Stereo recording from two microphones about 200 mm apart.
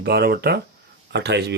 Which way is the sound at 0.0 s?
50° right (ahead or behind).